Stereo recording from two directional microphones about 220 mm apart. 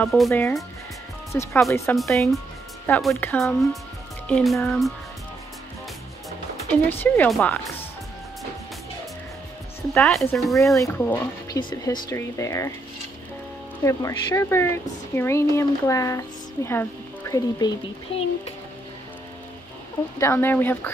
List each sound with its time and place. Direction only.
0.0 s speech: centre (ahead or behind)
0.3 s speech: 10° left (ahead or behind)
2.0 s speech: centre (ahead or behind)
6.7 s speech: 10° left (ahead or behind)
9.9 s speech: 5° left (ahead or behind)
10.8 s speech: 10° left (ahead or behind)
13.8 s speech: 15° left (ahead or behind)
20.2 s speech: 10° left (ahead or behind)